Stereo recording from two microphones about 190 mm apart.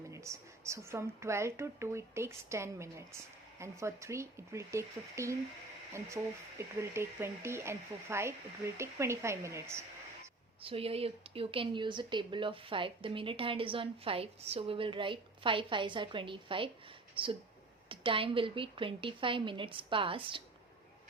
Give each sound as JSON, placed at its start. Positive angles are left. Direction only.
{"t": 0.1, "sound": "speech", "side_deg": -15}
{"t": 6.6, "sound": "speech", "side_deg": -15}
{"t": 10.6, "sound": "a woman's voice", "side_deg": -30}
{"t": 17.8, "sound": "a woman's voice", "side_deg": -25}